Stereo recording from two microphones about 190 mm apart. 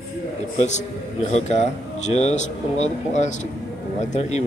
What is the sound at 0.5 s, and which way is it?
A man's voice, 35° left (ahead or behind).